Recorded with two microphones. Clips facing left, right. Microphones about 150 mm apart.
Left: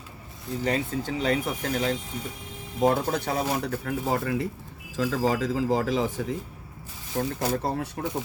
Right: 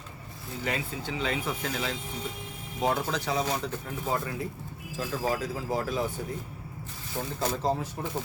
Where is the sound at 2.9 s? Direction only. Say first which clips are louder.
Left 3 dB; 55° left (ahead or behind); by 6.2 s 90° left.